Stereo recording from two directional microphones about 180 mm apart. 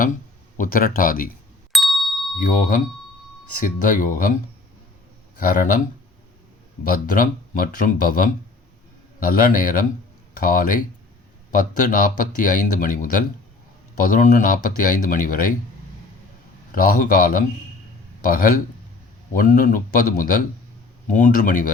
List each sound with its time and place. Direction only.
0.0 s speech: 45° left (ahead or behind)
1.7 s ding: centre (ahead or behind)
2.4 s speech: 45° left (ahead or behind)
5.4 s speech: 50° left (ahead or behind)
6.8 s speech: 50° left (ahead or behind)
16.7 s speech: 50° left (ahead or behind)